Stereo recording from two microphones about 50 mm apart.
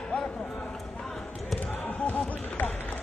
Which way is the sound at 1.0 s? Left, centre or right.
Centre.